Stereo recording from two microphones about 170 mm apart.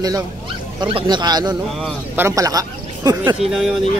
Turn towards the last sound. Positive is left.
turn(degrees=0)  # may be behind; listen again after turning